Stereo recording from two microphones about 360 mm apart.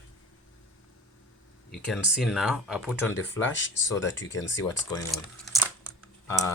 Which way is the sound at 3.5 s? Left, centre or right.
Left.